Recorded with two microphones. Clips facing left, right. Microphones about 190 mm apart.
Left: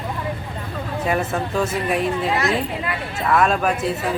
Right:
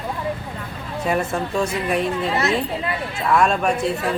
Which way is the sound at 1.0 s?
Centre (ahead or behind).